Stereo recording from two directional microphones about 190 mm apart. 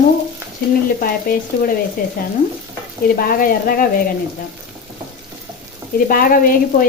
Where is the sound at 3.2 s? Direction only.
50° left (ahead or behind).